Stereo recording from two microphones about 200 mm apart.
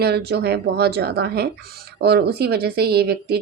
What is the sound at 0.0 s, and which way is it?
Speech, 55° right (ahead or behind).